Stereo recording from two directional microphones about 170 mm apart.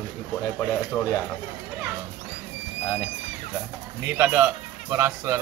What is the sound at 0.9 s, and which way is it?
Speech, 5° left (ahead or behind).